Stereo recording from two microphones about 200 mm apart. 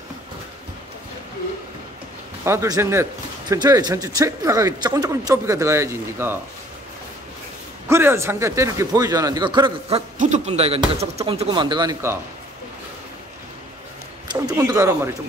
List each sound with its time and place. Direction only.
2.4 s speech: 15° right (ahead or behind)
7.9 s speech: 10° right (ahead or behind)
14.3 s speech: 20° right (ahead or behind)